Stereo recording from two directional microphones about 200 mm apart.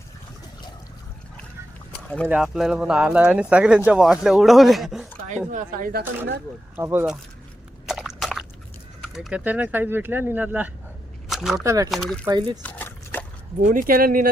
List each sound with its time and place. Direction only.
2.2 s speech: 5° right (ahead or behind)
5.5 s speech: 40° right (ahead or behind)
6.7 s speech: 10° right (ahead or behind)
7.9 s a sound: centre (ahead or behind)
9.1 s speech: 5° right (ahead or behind)
11.3 s a sound: centre (ahead or behind)
11.5 s speech: 15° right (ahead or behind)
11.9 s speech: centre (ahead or behind)
12.2 s speech: 20° right (ahead or behind)
12.6 s liquid: 10° left (ahead or behind)
13.6 s speech: 40° right (ahead or behind)